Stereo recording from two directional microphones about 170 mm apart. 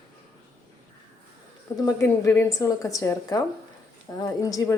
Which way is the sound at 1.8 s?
20° left (ahead or behind).